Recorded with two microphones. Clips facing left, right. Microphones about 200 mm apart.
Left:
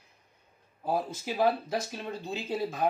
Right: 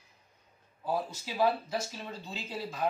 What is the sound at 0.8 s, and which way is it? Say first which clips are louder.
Speech: left 3 dB; 55° left (ahead or behind).